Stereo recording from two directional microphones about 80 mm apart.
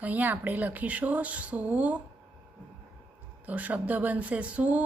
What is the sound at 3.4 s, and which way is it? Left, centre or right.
Speech, centre.